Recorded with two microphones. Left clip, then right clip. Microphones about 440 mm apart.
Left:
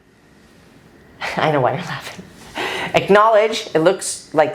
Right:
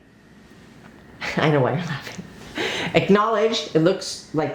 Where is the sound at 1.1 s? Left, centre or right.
Left.